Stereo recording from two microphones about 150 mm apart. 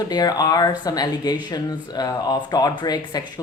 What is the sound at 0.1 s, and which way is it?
A woman's voice, 25° left (ahead or behind).